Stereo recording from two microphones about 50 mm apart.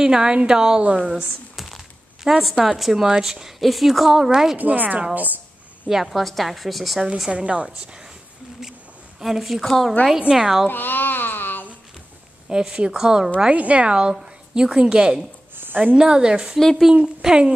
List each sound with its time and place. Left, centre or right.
0.0 s a woman's voice: centre
2.2 s a woman's voice: centre
4.6 s speech: right
6.0 s a woman's voice: centre
7.2 s a woman's voice: right
9.2 s a woman's voice: centre
10.3 s a woman's voice: centre
10.7 s a sound: left
12.4 s a woman's voice: centre
13.5 s a woman's voice: right
15.5 s a sound: right
16.0 s a woman's voice: centre
16.5 s a woman's voice: centre
16.9 s a woman's voice: centre